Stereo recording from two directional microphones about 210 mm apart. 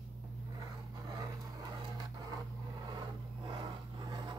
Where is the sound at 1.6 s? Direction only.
20° right (ahead or behind).